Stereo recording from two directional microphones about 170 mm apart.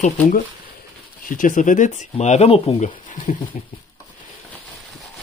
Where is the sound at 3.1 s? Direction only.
45° left (ahead or behind).